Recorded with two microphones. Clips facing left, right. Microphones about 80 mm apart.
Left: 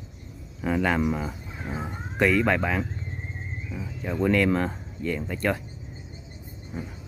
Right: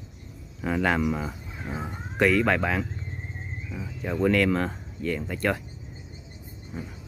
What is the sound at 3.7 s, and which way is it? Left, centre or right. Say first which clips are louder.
Speech: right 1 dB; centre.